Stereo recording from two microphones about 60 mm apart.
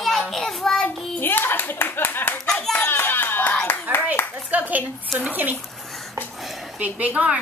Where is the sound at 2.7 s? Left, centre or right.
Left.